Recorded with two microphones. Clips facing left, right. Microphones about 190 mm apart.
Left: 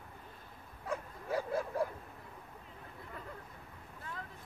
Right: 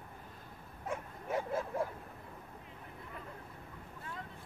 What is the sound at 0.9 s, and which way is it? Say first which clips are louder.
Bow-wow: left 1 dB; 25° right (ahead or behind).